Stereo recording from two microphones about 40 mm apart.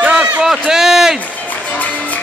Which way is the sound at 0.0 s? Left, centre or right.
Centre.